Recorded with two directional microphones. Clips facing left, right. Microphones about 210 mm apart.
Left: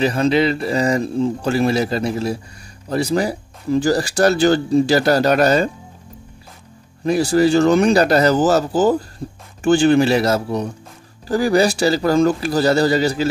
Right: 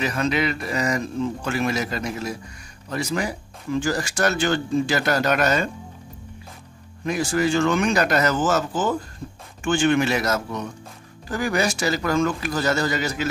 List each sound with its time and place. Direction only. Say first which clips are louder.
0.0 s speech: left 7 dB; 30° left (ahead or behind)
7.1 s speech: left 7 dB; 35° left (ahead or behind)